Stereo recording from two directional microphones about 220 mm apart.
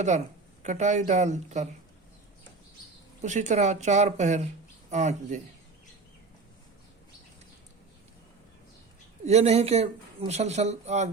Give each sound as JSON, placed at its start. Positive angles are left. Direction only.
{"t": 0.6, "sound": "speech", "side_deg": -30}
{"t": 3.2, "sound": "speech", "side_deg": -35}
{"t": 9.2, "sound": "speech", "side_deg": -30}